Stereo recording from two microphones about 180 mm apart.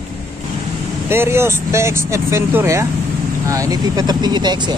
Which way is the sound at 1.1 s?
15° right (ahead or behind).